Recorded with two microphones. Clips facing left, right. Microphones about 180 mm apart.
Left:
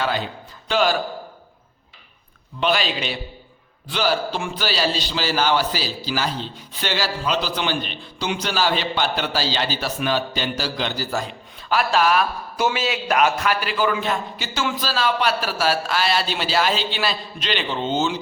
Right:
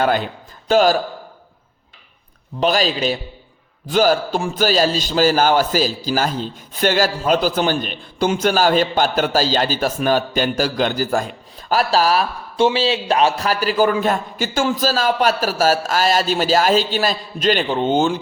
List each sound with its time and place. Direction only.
0.7 s a man's voice: 40° right (ahead or behind)
2.6 s a man's voice: 40° right (ahead or behind)
11.7 s a man's voice: 35° right (ahead or behind); by 18.2 s 55° right (ahead or behind)